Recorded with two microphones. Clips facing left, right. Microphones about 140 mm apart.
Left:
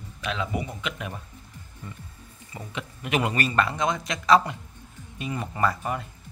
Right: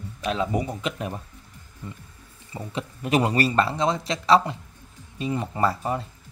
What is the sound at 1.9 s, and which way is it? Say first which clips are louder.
Speech: right 3 dB; 20° right (ahead or behind).